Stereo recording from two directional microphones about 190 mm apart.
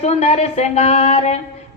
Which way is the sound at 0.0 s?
35° left (ahead or behind).